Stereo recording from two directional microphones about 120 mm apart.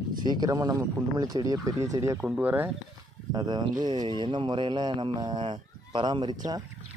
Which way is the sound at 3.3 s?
35° right (ahead or behind).